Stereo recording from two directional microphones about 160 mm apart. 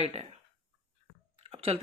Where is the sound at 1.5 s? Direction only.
35° right (ahead or behind).